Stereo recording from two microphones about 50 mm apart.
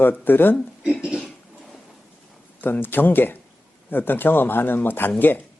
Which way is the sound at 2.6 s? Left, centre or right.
Left.